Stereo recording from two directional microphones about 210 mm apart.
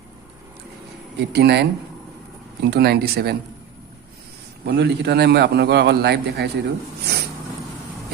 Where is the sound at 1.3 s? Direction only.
50° right (ahead or behind).